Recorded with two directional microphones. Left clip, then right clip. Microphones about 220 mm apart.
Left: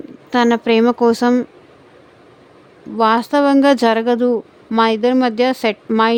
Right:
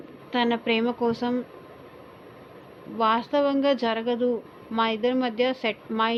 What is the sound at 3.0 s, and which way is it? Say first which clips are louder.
A woman's voice: left 9 dB; 55° left (ahead or behind).